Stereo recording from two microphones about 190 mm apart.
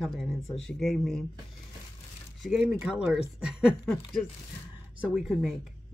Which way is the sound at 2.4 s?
5° right (ahead or behind).